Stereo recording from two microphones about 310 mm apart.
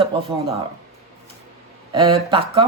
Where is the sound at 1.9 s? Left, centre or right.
Centre.